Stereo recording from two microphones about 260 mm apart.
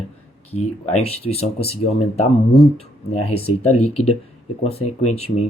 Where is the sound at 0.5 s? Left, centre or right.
Left.